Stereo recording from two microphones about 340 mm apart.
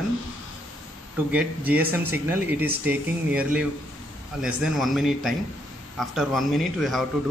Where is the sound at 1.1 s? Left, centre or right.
Centre.